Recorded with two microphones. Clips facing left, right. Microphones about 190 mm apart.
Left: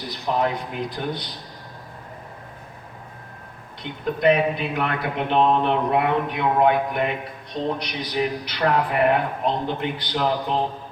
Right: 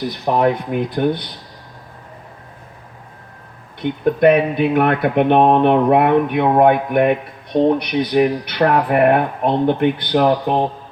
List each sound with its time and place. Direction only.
0.3 s speech: 55° right (ahead or behind)
3.8 s speech: 60° right (ahead or behind)